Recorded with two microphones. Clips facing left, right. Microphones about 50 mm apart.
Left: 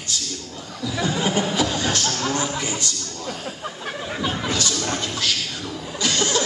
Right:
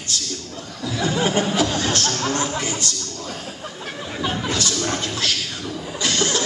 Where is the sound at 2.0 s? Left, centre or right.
Centre.